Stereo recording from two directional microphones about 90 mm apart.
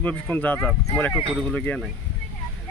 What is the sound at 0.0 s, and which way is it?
Speech, 20° left (ahead or behind).